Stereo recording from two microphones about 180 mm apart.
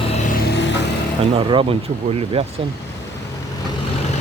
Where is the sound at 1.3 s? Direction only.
30° right (ahead or behind).